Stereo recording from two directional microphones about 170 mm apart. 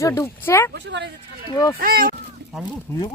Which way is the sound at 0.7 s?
90° right.